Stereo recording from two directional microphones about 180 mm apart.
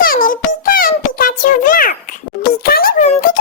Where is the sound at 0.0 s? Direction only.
50° left (ahead or behind).